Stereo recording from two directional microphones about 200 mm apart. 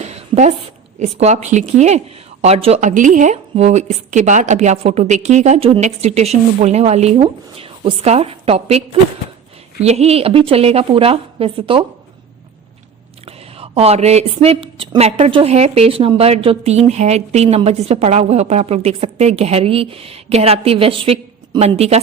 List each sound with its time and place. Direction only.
0.0 s a sound: 35° right (ahead or behind)
0.9 s speech: 35° right (ahead or behind)
9.8 s a woman's voice: 30° right (ahead or behind)
13.2 s speech: 30° right (ahead or behind)